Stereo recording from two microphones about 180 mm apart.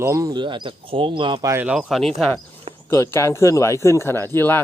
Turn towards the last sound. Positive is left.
turn(degrees=10)  # may be behind; listen again after turning